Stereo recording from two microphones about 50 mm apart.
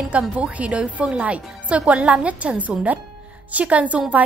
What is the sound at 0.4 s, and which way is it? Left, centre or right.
A woman's voice, right.